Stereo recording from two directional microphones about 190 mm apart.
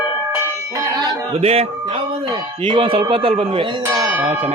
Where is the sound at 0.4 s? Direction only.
15° right (ahead or behind).